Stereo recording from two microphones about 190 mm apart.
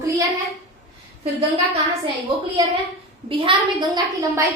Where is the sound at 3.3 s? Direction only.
25° right (ahead or behind).